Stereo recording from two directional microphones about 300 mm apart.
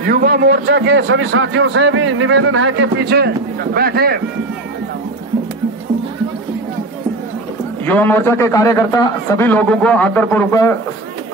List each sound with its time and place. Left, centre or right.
0.0 s a man's voice: right
7.8 s a man's voice: centre